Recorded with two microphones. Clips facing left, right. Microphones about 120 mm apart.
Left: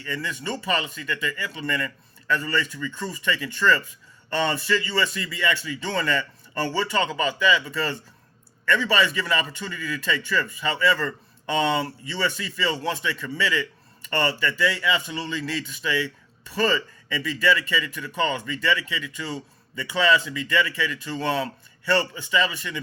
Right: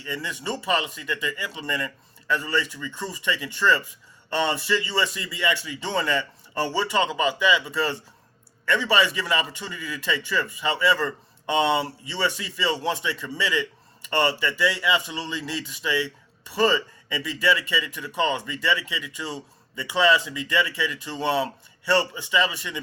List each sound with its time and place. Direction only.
0.0 s a man's voice: 20° right (ahead or behind)